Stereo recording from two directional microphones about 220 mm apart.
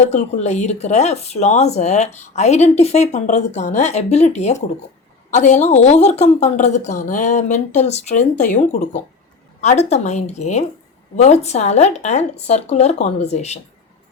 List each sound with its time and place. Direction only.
0.1 s a woman's voice: 30° left (ahead or behind)